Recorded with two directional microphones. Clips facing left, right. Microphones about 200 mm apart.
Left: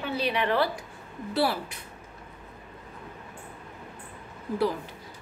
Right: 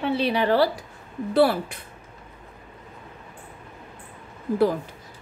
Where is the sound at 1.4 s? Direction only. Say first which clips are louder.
Right 7 dB; 55° right (ahead or behind).